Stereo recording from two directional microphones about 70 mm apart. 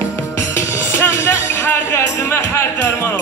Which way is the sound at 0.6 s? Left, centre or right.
Left.